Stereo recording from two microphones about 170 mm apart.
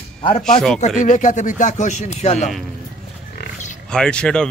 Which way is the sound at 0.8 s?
50° left (ahead or behind).